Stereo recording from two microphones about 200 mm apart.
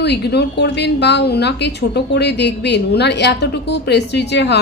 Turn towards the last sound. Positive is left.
turn(degrees=60)  # may be behind; listen again after turning